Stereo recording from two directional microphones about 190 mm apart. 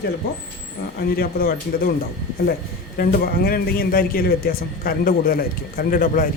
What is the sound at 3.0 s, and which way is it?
A man's voice, 50° left (ahead or behind).